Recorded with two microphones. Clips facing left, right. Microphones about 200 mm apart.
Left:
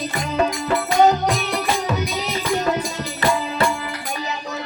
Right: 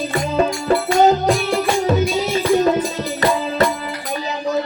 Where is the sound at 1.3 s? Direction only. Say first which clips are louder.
Right 5 dB; 30° right (ahead or behind).